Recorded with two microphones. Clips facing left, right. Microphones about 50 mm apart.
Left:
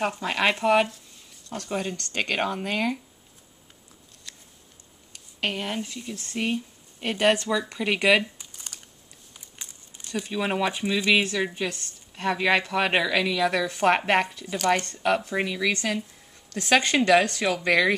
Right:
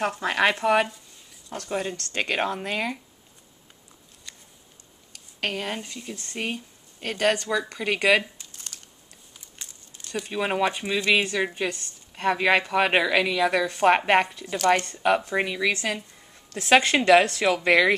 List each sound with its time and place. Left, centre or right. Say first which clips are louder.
0.2 s a woman's voice: right 3 dB; centre
4.3 s a sound: even; centre
5.4 s speech: even; centre
5.7 s a woman's voice: left 1 dB; centre
7.0 s speech: left 2 dB; centre
7.4 s a woman's voice: even; centre
7.8 s speech: even; centre
8.4 s a sound: even; centre
10.2 s a woman's voice: right 2 dB; centre; by 17.9 s right